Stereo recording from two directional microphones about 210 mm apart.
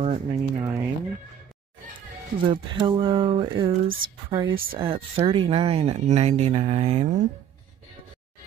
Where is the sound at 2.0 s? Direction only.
25° right (ahead or behind).